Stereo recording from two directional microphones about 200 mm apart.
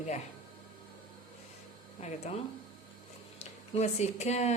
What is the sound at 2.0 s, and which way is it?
Speech, 35° left (ahead or behind).